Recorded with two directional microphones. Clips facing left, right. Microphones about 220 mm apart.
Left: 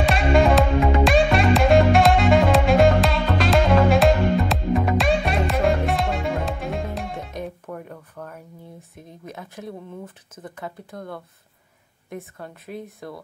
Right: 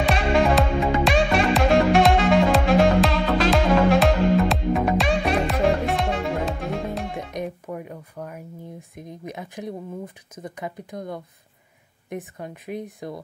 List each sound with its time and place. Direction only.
0.0 s music: centre (ahead or behind)
7.4 s a sound: 10° right (ahead or behind)
8.9 s speech: 15° right (ahead or behind)